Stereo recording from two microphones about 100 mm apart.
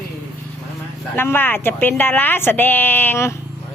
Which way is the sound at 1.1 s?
20° left (ahead or behind).